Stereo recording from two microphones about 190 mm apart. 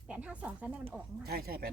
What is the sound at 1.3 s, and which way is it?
Speech, 55° right (ahead or behind).